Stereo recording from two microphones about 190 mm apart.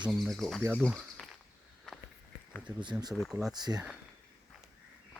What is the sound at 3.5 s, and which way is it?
Speech, 20° right (ahead or behind).